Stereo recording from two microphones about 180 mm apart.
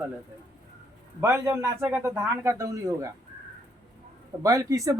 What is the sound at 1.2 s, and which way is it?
Speech, 15° right (ahead or behind).